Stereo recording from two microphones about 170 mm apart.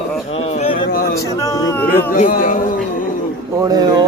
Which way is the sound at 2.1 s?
55° left (ahead or behind).